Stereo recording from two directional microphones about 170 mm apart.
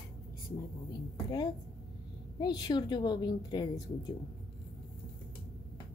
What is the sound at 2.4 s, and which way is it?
Speech, 25° left (ahead or behind).